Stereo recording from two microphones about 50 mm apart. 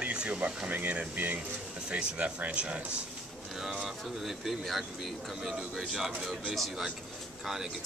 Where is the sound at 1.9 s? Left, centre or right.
Right.